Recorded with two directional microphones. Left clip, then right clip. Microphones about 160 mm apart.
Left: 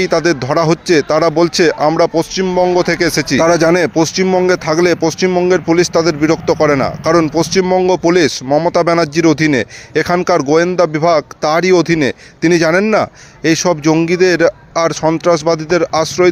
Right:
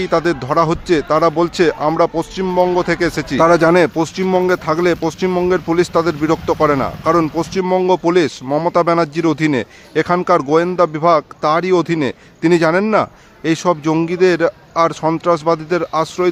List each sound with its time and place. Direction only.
0.0 s speech: 20° left (ahead or behind)